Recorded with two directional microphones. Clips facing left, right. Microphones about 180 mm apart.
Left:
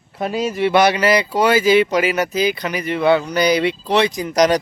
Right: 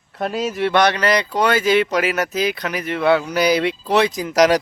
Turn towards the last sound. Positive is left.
turn(degrees=-5)  # may be behind; listen again after turning